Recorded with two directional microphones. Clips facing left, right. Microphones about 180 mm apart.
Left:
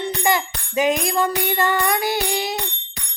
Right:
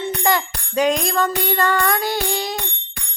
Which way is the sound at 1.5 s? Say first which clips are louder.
Right 2 dB; 20° left (ahead or behind).